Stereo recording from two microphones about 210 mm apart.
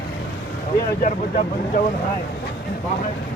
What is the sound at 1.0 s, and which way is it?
Speech, 40° left (ahead or behind).